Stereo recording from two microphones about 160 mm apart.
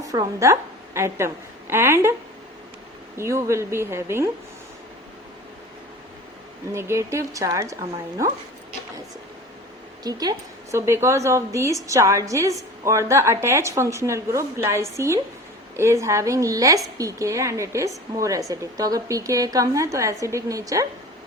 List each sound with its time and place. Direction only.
0.0 s a woman's voice: 20° right (ahead or behind)
3.2 s a woman's voice: 20° right (ahead or behind)
6.7 s a woman's voice: 15° right (ahead or behind)
10.0 s a woman's voice: 25° right (ahead or behind)